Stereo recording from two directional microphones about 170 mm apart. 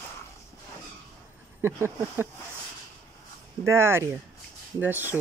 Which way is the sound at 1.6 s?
15° right (ahead or behind).